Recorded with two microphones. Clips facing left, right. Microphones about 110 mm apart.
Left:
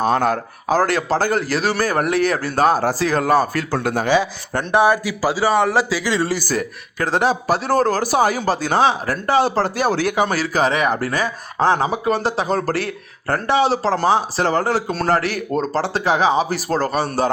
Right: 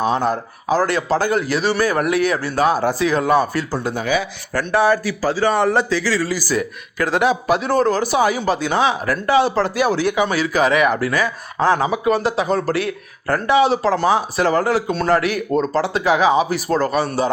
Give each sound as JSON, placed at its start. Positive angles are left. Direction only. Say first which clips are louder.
{"t": 0.0, "sound": "speech", "louder": "left 1 dB", "side_deg": 50}
{"t": 4.0, "sound": "speech", "louder": "left 3 dB", "side_deg": 30}
{"t": 4.7, "sound": "speech", "louder": "left 1 dB", "side_deg": 15}
{"t": 6.0, "sound": "speech", "louder": "even", "side_deg": 20}
{"t": 6.3, "sound": "speech", "louder": "right 1 dB", "side_deg": 45}
{"t": 7.0, "sound": "speech", "louder": "right 1 dB", "side_deg": 30}